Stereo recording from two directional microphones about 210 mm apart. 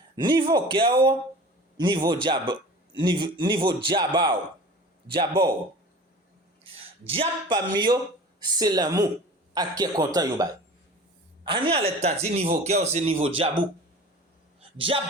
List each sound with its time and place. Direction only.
0.2 s a man's voice: 20° right (ahead or behind)
7.1 s a man's voice: 25° right (ahead or behind)
14.8 s a man's voice: 25° right (ahead or behind)